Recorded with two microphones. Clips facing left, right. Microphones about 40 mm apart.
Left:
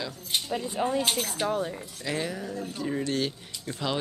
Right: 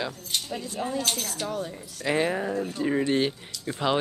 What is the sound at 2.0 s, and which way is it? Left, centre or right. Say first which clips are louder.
Speech: right 7 dB; right.